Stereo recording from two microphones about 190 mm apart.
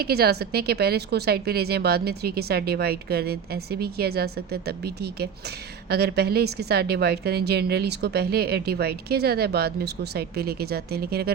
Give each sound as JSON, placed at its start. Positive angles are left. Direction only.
{"t": 0.0, "sound": "a woman's voice", "side_deg": -55}